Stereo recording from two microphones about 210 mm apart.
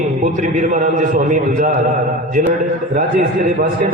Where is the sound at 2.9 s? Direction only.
45° right (ahead or behind).